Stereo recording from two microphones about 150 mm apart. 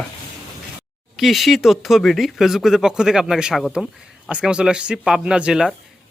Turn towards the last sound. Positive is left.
turn(degrees=-5)  # may be behind; listen again after turning